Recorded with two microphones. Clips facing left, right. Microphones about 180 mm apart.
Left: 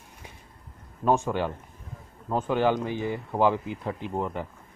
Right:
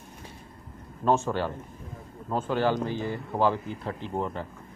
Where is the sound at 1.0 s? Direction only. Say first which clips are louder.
Left 1 dB; 15° left (ahead or behind).